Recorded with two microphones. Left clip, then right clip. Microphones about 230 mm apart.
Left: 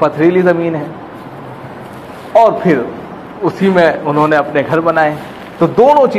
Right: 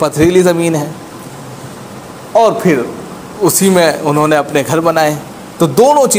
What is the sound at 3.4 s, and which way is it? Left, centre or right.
A man's voice, right.